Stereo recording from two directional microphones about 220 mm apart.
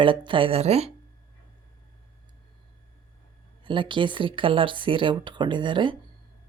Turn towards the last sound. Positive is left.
turn(degrees=-20)  # may be behind; listen again after turning